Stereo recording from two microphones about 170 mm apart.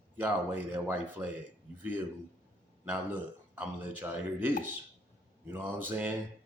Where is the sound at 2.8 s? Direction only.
10° right (ahead or behind).